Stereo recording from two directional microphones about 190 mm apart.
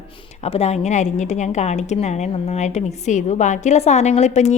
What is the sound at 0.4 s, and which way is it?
A woman's voice, 35° left (ahead or behind).